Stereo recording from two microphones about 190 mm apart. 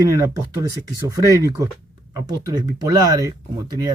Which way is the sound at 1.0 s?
15° right (ahead or behind).